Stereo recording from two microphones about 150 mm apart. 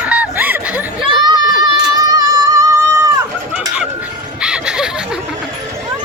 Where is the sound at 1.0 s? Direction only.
30° right (ahead or behind).